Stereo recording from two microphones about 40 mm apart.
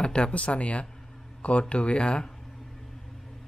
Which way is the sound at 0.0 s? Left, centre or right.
Left.